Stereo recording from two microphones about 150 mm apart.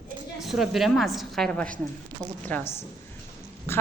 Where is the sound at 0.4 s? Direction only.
Centre (ahead or behind).